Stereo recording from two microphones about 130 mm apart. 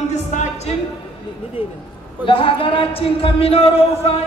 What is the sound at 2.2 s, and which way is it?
Speech, 45° left (ahead or behind).